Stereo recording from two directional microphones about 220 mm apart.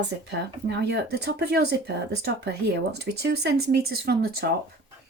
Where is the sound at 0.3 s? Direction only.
50° right (ahead or behind).